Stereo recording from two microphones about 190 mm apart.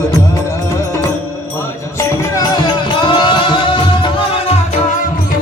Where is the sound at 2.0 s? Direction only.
20° left (ahead or behind).